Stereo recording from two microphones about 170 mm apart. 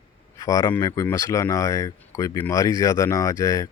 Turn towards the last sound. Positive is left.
turn(degrees=20)  # may be behind; listen again after turning